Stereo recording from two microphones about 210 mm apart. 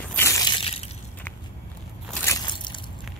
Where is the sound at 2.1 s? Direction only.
10° left (ahead or behind).